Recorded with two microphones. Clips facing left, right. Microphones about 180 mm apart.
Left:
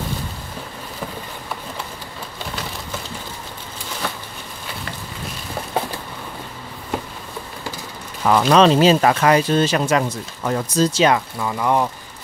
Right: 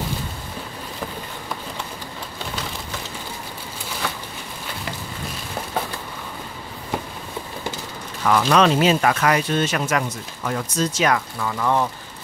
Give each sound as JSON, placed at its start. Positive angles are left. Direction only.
{"t": 8.2, "sound": "speech", "side_deg": 30}